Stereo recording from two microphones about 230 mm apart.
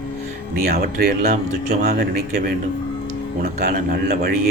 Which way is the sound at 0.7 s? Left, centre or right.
Right.